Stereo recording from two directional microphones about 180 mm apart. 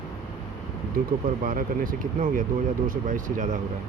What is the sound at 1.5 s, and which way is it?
Speech, 50° right (ahead or behind).